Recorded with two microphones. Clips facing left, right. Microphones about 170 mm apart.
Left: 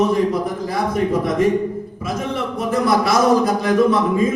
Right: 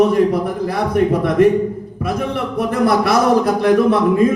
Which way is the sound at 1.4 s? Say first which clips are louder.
Right 4 dB; 60° right (ahead or behind).